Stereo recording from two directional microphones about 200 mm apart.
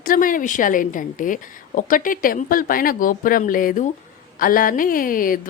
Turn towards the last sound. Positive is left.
turn(degrees=45)  # may be behind; listen again after turning